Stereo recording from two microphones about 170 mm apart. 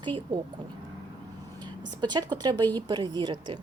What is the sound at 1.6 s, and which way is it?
A woman's voice, 25° right (ahead or behind).